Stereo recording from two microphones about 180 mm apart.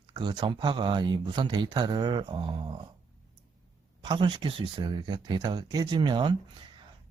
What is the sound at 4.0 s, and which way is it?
A man's voice, 25° right (ahead or behind).